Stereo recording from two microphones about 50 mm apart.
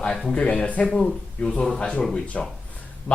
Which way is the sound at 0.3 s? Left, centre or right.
Left.